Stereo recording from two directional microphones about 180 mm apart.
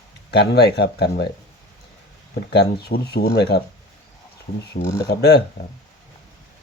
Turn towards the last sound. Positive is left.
turn(degrees=65)  # may be behind; listen again after turning